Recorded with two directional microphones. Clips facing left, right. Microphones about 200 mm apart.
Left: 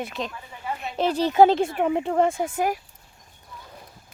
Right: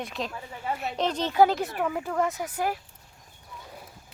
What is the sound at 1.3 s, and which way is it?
Speech, 25° left (ahead or behind).